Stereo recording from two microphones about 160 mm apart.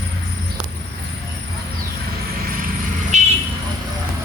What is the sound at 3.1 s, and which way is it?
Vehicle, 45° right (ahead or behind).